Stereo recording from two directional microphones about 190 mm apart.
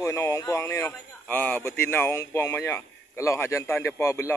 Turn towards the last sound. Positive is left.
turn(degrees=15)  # may be behind; listen again after turning